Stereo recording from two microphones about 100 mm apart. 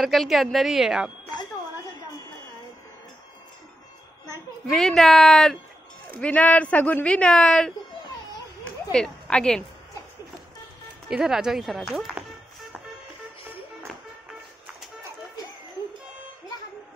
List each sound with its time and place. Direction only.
0.0 s speech: centre (ahead or behind)
1.3 s a sound: 40° left (ahead or behind)
4.6 s speech: 5° left (ahead or behind)
6.1 s speech: 15° left (ahead or behind)
8.9 s speech: 5° left (ahead or behind)
11.1 s speech: 5° right (ahead or behind)